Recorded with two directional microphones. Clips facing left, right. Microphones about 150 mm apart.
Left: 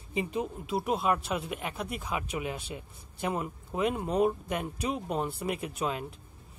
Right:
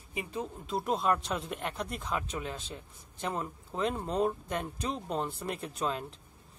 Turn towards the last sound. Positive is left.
turn(degrees=10)  # may be behind; listen again after turning